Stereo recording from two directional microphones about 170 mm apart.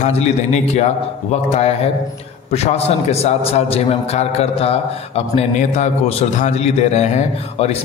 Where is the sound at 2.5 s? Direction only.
40° left (ahead or behind).